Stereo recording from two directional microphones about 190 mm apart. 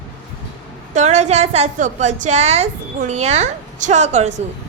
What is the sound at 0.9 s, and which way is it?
A woman's voice, 40° right (ahead or behind).